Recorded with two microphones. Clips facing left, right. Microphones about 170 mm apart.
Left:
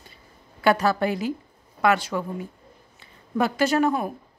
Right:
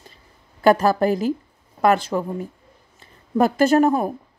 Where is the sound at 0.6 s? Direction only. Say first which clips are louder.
Right 5 dB; 45° right (ahead or behind).